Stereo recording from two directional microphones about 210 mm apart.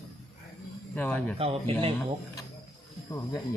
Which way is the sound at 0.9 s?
5° left (ahead or behind).